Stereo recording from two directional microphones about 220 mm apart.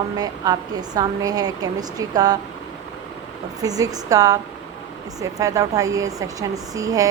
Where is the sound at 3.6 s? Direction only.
15° right (ahead or behind).